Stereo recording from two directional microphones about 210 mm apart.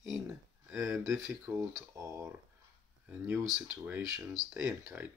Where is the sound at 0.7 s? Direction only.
15° right (ahead or behind).